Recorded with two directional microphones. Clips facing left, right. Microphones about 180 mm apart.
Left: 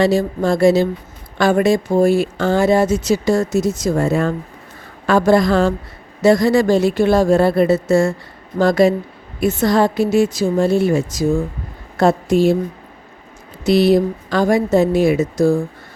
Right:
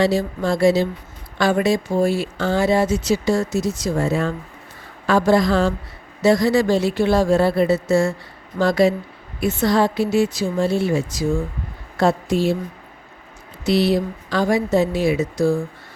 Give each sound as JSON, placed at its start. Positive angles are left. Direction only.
{"t": 0.0, "sound": "a woman's voice", "side_deg": 50}
{"t": 13.7, "sound": "speech", "side_deg": 45}